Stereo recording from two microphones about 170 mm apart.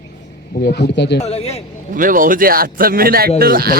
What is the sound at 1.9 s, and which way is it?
A man's voice, 55° right (ahead or behind).